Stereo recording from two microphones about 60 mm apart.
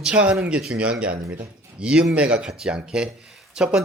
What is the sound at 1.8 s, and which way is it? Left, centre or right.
Speech, centre.